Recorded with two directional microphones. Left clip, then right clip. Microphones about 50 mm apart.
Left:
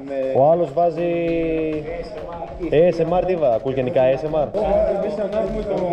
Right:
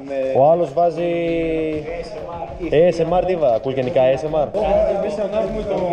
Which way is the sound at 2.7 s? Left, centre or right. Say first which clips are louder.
Right 1 dB; left.